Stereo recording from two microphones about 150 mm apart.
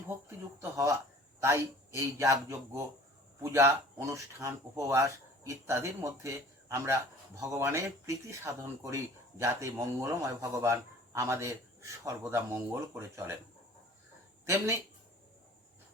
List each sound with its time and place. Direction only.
0.6 s a man's voice: 20° right (ahead or behind)
14.4 s speech: 20° right (ahead or behind)